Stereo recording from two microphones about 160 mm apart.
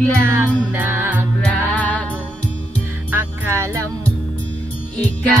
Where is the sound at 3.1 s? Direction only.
15° right (ahead or behind).